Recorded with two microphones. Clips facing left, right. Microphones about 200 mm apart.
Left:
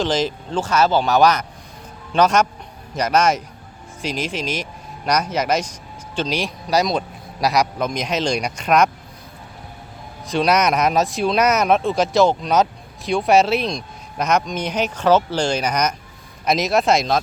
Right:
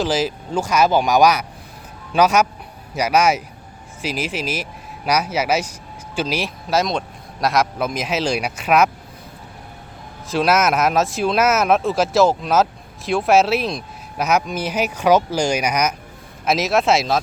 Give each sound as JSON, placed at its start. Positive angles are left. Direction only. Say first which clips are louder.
{"t": 0.0, "sound": "speech", "louder": "even", "side_deg": -5}
{"t": 10.2, "sound": "speech", "louder": "even", "side_deg": 0}